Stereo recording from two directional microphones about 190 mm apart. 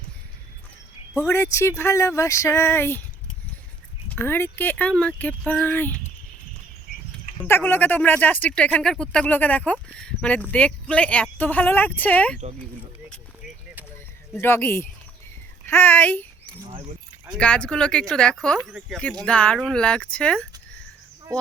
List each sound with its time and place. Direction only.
1.1 s speech: 15° left (ahead or behind)
4.1 s speech: 10° left (ahead or behind)
7.4 s speech: 10° left (ahead or behind)
14.3 s speech: 15° left (ahead or behind)
15.6 s a sound: 10° left (ahead or behind)
17.4 s speech: 5° left (ahead or behind)
19.2 s speech: 5° left (ahead or behind)